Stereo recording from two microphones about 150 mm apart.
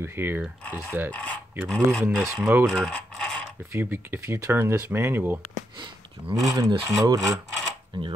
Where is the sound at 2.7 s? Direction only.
5° left (ahead or behind).